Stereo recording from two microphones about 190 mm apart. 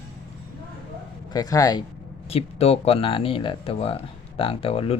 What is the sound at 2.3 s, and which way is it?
Speech, 30° left (ahead or behind).